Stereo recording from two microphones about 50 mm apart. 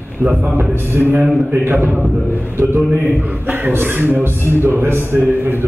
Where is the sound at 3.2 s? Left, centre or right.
Right.